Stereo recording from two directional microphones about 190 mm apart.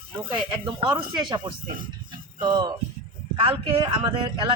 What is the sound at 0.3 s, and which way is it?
A man's voice, 25° right (ahead or behind).